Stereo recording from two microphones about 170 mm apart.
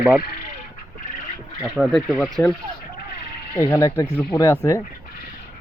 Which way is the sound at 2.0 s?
Centre (ahead or behind).